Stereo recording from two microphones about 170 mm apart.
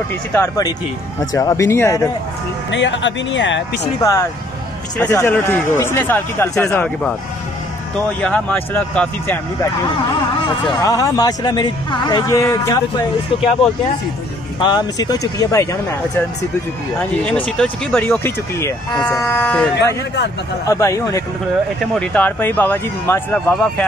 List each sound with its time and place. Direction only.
0.3 s speech: 20° left (ahead or behind)
2.7 s speech: 90° left
4.0 s speech: 20° left (ahead or behind)
8.2 s speech: 10° left (ahead or behind)
10.8 s speech: 20° left (ahead or behind)
14.6 s speech: 25° left (ahead or behind)
17.2 s speech: 5° left (ahead or behind)
20.6 s speech: 20° left (ahead or behind)